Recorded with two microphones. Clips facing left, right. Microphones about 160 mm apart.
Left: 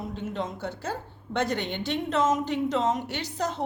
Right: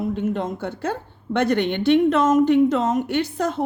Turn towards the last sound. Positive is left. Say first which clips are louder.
# right 8 dB
turn(degrees=-55)  # may be behind; listen again after turning